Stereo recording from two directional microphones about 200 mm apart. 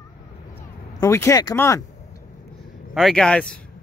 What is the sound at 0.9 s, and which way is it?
Speech, 15° left (ahead or behind).